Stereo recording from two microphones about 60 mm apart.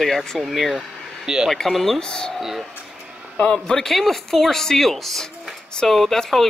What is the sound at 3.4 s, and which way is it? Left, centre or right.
Speech, centre.